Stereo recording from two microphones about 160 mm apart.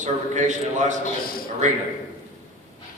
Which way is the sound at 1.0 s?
65° left (ahead or behind).